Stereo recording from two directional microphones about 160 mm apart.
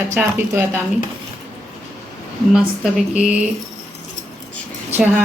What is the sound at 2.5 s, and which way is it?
Speech, 5° right (ahead or behind).